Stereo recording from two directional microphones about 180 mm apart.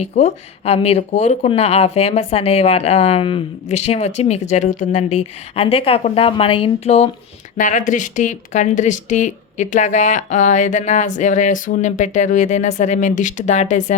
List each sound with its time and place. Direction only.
0.0 s speech: 35° left (ahead or behind)